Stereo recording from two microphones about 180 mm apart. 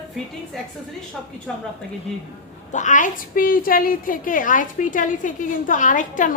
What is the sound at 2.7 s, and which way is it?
A woman's voice, 45° left (ahead or behind).